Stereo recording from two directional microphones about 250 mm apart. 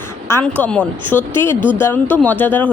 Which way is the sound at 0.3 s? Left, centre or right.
Centre.